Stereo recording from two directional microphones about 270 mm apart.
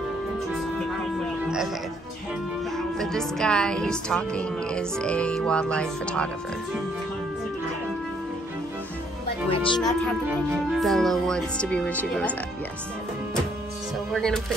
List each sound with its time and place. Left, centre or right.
3.0 s a woman's voice: centre
9.5 s speech: centre
9.8 s a woman's voice: centre
14.1 s a woman's voice: centre